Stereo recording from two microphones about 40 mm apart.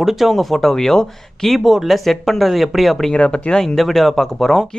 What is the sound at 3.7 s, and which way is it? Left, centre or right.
Speech, centre.